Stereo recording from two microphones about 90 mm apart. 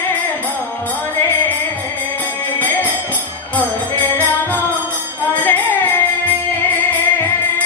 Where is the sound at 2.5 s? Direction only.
20° left (ahead or behind).